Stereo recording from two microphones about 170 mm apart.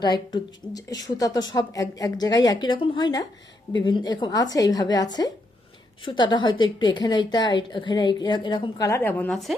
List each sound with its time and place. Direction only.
0.0 s a woman's voice: 25° left (ahead or behind)
6.1 s a woman's voice: 25° left (ahead or behind); by 9.6 s centre (ahead or behind)